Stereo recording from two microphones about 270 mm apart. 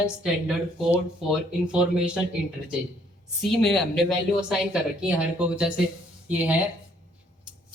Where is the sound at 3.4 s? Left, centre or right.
Centre.